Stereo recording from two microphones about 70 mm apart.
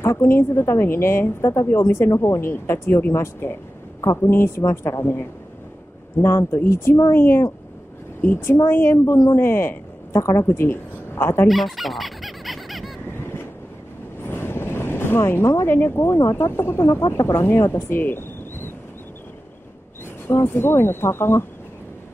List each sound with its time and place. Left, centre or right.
0.0 s a woman's voice: left
2.5 s a woman's voice: left
6.2 s a woman's voice: left
11.4 s a sound: centre
14.2 s vehicle: left
16.3 s a woman's voice: left
16.8 s a woman's voice: left
20.4 s a woman's voice: left